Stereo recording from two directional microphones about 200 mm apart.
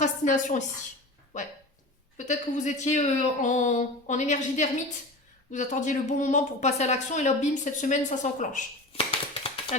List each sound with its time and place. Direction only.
0.0 s a woman's voice: 40° left (ahead or behind)